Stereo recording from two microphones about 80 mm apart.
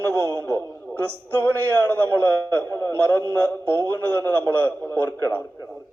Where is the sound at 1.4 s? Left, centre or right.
Left.